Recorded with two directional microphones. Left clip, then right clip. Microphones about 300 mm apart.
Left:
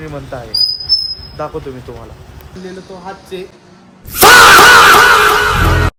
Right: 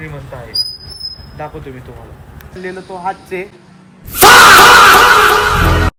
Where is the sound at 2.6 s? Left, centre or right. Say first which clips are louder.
Right 7 dB; centre.